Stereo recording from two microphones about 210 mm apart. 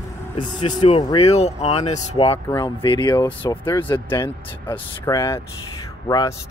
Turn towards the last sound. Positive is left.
turn(degrees=20)  # may be behind; listen again after turning